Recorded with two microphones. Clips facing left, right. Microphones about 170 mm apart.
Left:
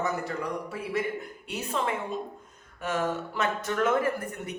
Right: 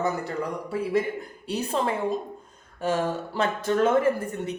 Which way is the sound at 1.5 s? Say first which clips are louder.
Right 4 dB; 35° right (ahead or behind).